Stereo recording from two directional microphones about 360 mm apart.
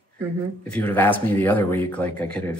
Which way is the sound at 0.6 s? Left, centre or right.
Centre.